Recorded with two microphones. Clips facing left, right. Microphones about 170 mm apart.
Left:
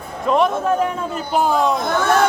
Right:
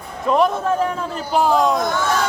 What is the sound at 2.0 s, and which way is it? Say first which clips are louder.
Speech: left 5 dB; 55° left (ahead or behind).